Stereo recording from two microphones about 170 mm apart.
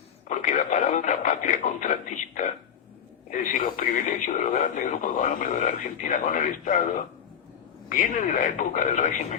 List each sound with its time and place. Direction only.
0.3 s speech: 45° left (ahead or behind)